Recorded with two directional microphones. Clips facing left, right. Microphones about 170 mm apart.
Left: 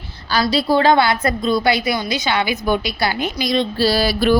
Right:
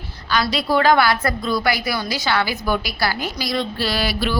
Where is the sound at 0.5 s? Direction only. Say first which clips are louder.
Left 2 dB; 30° left (ahead or behind).